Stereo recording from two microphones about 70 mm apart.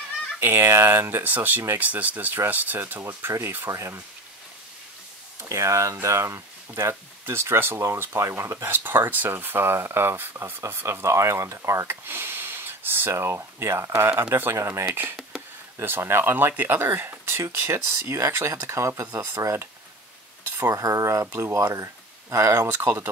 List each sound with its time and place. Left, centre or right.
0.4 s speech: right
5.5 s speech: right
12.1 s speech: right
20.6 s speech: right
22.8 s speech: right